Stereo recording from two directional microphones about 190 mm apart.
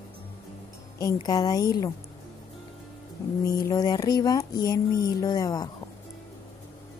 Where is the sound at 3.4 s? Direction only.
20° left (ahead or behind).